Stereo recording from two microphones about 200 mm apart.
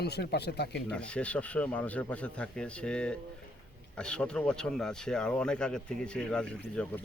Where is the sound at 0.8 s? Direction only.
5° left (ahead or behind).